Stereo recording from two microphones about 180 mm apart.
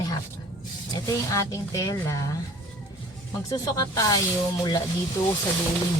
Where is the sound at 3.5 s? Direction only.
20° left (ahead or behind).